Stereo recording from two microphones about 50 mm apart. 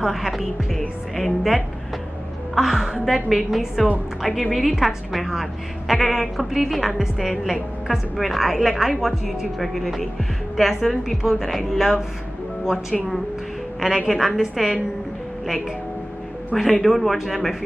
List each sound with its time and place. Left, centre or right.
0.0 s a woman's voice: centre
16.8 s a woman's voice: centre